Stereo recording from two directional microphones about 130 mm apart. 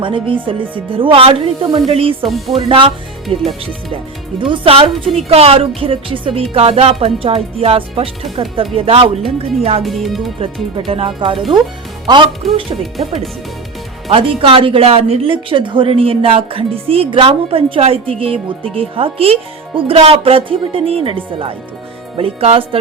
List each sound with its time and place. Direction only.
0.0 s a woman's voice: 40° right (ahead or behind)
3.2 s speech: centre (ahead or behind)
4.4 s a woman's voice: 40° right (ahead or behind)
9.8 s speech: centre (ahead or behind)
10.4 s speech: 45° right (ahead or behind)
14.1 s a woman's voice: 45° right (ahead or behind)